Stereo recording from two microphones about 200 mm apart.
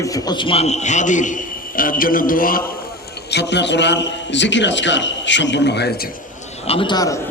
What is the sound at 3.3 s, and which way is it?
A man's voice, 60° left (ahead or behind).